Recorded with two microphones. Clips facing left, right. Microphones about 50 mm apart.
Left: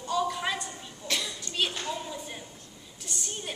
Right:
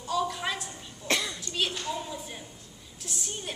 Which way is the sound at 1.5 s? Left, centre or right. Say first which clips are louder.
Left 1 dB; centre.